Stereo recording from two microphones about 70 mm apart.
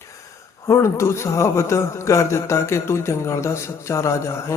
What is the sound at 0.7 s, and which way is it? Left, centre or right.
A man's voice, left.